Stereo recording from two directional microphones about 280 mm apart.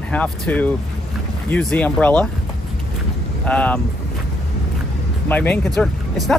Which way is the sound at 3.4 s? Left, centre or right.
Centre.